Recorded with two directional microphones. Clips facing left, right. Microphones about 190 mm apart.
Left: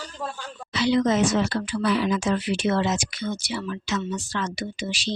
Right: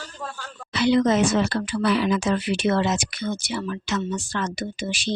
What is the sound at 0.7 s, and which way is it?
Speech, 55° right (ahead or behind).